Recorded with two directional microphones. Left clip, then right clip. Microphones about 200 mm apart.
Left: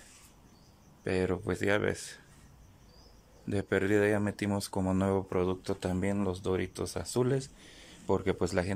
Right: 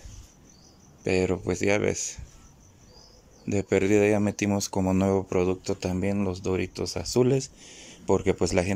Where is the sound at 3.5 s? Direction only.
10° right (ahead or behind).